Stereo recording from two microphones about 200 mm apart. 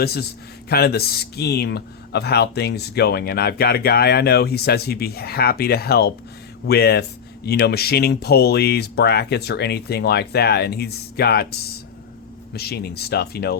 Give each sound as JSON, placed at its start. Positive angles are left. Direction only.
{"t": 0.0, "sound": "speech", "side_deg": 50}
{"t": 12.5, "sound": "speech", "side_deg": 55}